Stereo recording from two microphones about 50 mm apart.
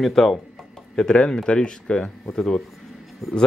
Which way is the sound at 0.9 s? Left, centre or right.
Centre.